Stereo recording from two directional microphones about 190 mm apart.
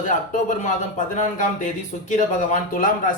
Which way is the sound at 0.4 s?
40° left (ahead or behind).